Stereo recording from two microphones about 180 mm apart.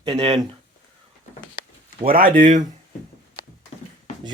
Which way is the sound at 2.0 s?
55° right (ahead or behind).